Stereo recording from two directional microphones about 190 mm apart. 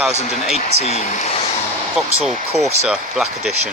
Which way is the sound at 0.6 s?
35° left (ahead or behind).